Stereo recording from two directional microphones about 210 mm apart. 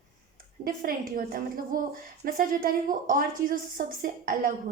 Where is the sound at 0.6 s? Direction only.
45° right (ahead or behind).